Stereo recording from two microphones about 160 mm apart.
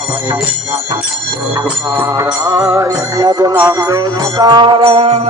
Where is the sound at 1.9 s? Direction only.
15° right (ahead or behind); by 5.2 s 35° right (ahead or behind).